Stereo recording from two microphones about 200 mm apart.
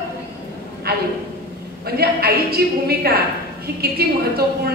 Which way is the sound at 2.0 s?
50° right (ahead or behind).